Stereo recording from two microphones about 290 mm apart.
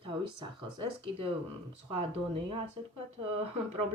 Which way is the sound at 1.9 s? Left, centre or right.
Centre.